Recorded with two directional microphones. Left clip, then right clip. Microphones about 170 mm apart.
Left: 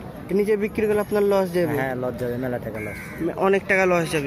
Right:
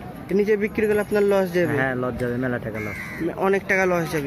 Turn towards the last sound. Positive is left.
turn(degrees=0)  # may be behind; listen again after turning